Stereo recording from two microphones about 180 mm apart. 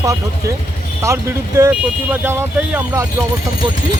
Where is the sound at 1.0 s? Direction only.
15° right (ahead or behind).